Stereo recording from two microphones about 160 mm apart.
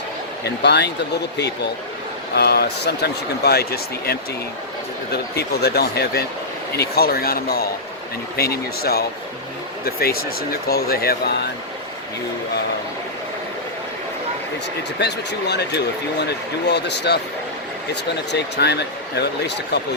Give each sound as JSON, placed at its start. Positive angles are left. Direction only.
{"t": 0.4, "sound": "speech", "side_deg": 90}
{"t": 2.3, "sound": "speech", "side_deg": 90}
{"t": 5.1, "sound": "speech", "side_deg": 90}
{"t": 14.9, "sound": "speech", "side_deg": 90}
{"t": 18.3, "sound": "speech", "side_deg": 90}